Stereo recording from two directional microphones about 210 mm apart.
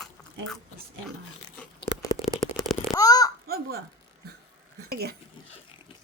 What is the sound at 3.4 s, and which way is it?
Speech, 45° right (ahead or behind).